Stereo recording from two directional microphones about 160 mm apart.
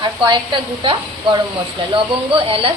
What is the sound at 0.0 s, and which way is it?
A woman's voice, 30° right (ahead or behind).